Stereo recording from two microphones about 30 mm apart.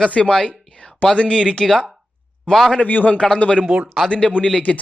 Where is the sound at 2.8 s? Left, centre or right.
Left.